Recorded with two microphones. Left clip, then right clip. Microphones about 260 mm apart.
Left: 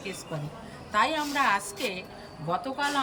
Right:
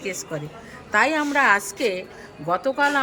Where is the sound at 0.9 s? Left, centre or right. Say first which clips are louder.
Right 6 dB; centre.